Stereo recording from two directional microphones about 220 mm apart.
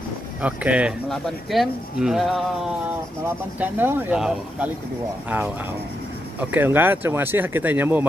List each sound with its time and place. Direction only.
0.4 s speech: 5° right (ahead or behind)
6.5 s speech: 10° right (ahead or behind)